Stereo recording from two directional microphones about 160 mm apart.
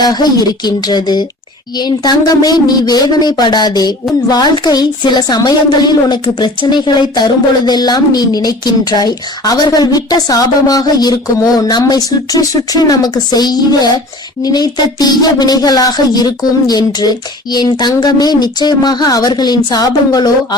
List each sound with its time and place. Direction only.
0.0 s a woman's voice: 25° left (ahead or behind)